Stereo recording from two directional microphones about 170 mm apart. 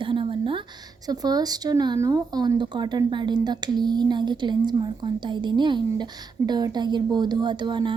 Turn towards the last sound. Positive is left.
turn(degrees=-25)  # may be behind; listen again after turning